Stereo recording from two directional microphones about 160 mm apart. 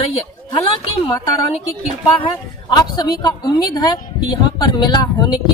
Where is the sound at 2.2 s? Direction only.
30° left (ahead or behind).